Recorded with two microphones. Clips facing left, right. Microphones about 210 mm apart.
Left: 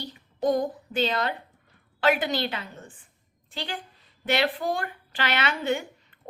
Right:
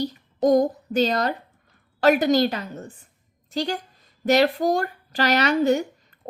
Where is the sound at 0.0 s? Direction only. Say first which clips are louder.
Right 5 dB; 40° right (ahead or behind).